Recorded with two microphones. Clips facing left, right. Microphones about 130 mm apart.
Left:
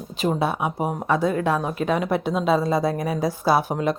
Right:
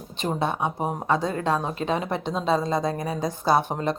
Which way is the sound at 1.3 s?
10° left (ahead or behind).